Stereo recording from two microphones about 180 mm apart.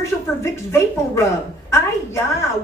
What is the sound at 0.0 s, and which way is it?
A woman's voice, 15° left (ahead or behind).